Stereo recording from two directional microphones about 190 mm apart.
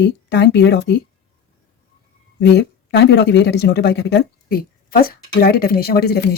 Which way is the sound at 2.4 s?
60° left (ahead or behind).